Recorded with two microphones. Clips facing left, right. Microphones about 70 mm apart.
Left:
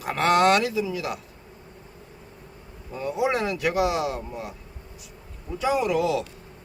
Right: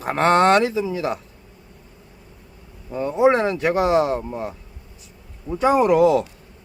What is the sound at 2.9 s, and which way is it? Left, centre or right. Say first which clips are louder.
Speech: right 8 dB; right.